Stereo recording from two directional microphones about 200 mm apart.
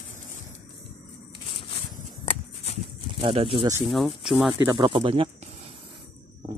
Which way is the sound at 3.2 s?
30° right (ahead or behind).